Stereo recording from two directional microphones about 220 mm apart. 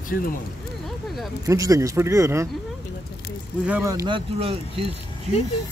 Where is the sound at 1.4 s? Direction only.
15° right (ahead or behind).